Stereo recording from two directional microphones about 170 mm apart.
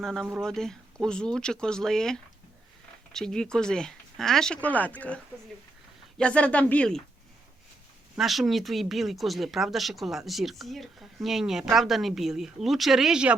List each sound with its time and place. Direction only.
0.0 s speech: centre (ahead or behind)
8.1 s speech: centre (ahead or behind)